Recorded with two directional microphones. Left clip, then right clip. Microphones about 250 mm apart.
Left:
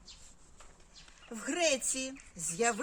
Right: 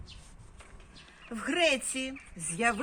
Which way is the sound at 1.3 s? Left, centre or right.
Left.